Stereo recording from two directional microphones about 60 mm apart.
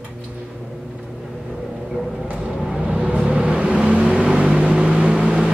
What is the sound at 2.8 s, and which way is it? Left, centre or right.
Vehicle, centre.